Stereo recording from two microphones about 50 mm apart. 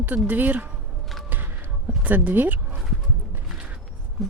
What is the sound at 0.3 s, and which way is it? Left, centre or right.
Speech, right.